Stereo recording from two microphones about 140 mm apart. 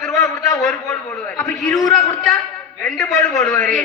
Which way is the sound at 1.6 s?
Centre (ahead or behind).